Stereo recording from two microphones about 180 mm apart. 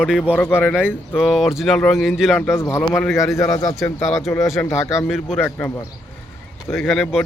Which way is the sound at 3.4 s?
5° left (ahead or behind).